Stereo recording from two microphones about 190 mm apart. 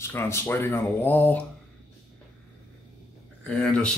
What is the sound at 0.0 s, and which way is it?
Speech, 15° left (ahead or behind).